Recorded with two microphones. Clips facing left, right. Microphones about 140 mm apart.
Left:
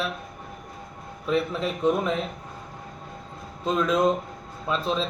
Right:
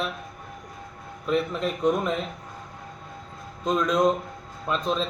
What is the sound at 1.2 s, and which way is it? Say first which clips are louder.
Speech: even; 5° left (ahead or behind).